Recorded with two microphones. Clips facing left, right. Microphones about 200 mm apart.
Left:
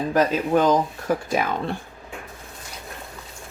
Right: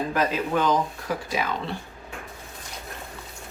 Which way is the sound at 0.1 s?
45° left (ahead or behind).